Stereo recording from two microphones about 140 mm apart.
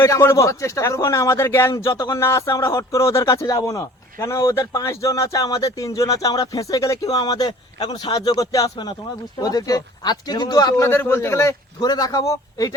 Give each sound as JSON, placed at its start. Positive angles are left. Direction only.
{"t": 0.0, "sound": "speech", "side_deg": 20}
{"t": 10.8, "sound": "speech", "side_deg": 15}